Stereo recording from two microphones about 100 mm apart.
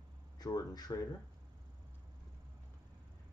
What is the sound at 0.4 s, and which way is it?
Speech, 40° left (ahead or behind).